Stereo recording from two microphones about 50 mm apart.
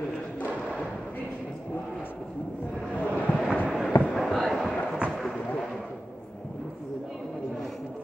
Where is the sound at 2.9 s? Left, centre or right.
Left.